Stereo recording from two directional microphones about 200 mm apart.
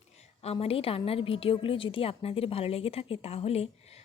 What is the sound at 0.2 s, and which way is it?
A woman's voice, 30° left (ahead or behind).